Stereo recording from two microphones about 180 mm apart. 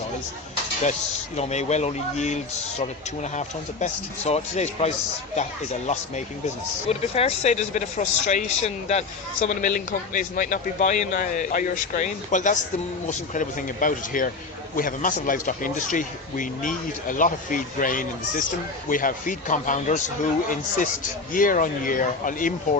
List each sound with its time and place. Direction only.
1.4 s a man's voice: 40° left (ahead or behind)